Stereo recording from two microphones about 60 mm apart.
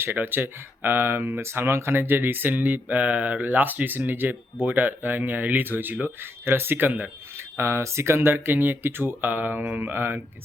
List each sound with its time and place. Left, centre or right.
0.0 s speech: right
6.4 s speech: right
7.5 s speech: right